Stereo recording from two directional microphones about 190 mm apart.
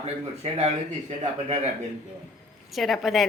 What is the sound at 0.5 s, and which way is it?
Speech, 35° right (ahead or behind).